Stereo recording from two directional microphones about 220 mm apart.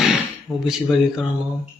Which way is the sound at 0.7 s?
Centre (ahead or behind).